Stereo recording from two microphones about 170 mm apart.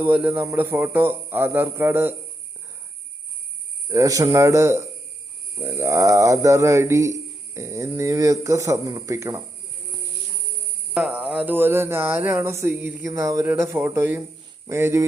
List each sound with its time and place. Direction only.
0.0 s speech: 10° right (ahead or behind)
3.8 s speech: 20° right (ahead or behind)
10.9 s speech: 5° right (ahead or behind)